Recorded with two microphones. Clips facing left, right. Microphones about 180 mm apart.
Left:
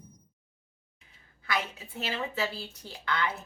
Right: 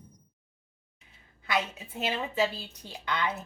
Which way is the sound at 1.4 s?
20° right (ahead or behind).